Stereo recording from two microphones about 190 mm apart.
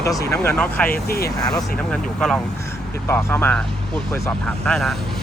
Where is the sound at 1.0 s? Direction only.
55° left (ahead or behind).